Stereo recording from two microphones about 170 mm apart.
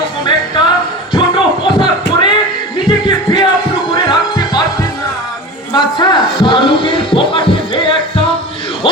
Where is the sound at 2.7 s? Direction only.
25° left (ahead or behind).